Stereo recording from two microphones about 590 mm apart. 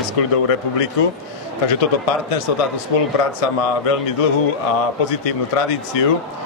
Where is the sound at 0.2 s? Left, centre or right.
Left.